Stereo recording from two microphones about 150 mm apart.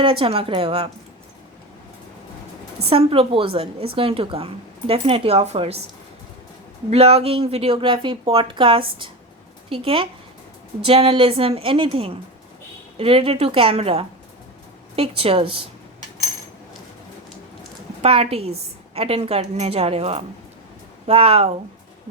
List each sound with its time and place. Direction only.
0.0 s a woman's voice: 35° right (ahead or behind)
2.9 s a woman's voice: 40° right (ahead or behind)
6.9 s a woman's voice: 40° right (ahead or behind)
18.0 s a woman's voice: 40° right (ahead or behind)